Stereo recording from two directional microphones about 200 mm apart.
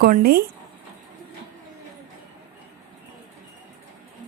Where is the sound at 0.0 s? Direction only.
50° right (ahead or behind).